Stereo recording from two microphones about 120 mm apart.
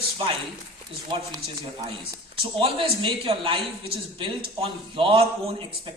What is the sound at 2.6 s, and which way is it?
A woman's voice, 50° right (ahead or behind).